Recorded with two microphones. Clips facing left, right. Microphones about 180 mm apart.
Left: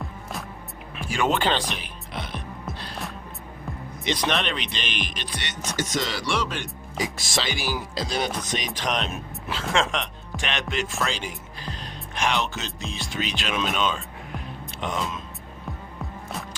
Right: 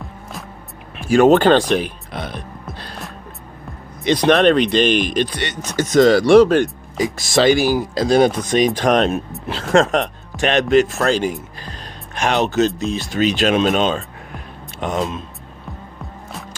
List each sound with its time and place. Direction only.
1.0 s music: 45° right (ahead or behind)
4.0 s speech: 50° right (ahead or behind)